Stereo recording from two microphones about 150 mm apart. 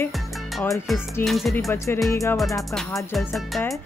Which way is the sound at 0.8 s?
Centre (ahead or behind).